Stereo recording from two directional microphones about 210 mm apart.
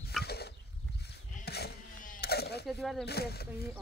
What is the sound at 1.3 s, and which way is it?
Sheep, 50° left (ahead or behind).